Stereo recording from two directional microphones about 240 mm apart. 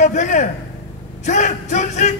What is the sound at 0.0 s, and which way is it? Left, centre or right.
Speech, left.